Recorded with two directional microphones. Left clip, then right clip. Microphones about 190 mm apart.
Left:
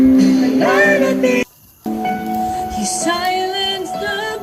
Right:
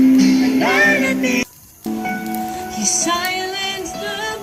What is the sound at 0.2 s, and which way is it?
Music, 40° left (ahead or behind).